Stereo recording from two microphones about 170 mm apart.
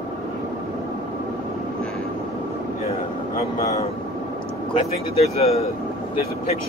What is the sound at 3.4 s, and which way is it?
Speech, 35° left (ahead or behind).